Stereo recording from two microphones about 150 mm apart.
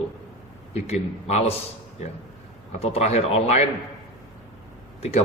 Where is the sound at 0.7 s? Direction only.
45° left (ahead or behind).